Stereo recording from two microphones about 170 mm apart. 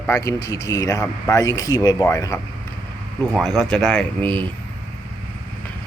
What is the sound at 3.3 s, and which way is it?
Speech, centre (ahead or behind).